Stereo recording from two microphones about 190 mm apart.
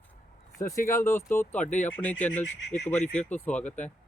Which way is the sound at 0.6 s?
15° left (ahead or behind).